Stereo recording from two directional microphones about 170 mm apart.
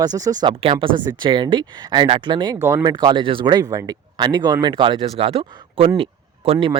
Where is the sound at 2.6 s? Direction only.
15° right (ahead or behind).